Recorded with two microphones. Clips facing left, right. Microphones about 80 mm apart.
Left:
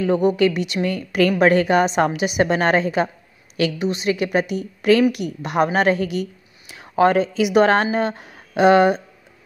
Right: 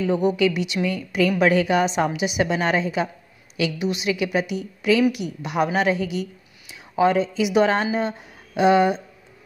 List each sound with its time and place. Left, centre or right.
0.0 s a woman's voice: left